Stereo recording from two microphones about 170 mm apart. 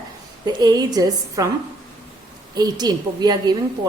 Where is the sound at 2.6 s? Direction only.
25° right (ahead or behind).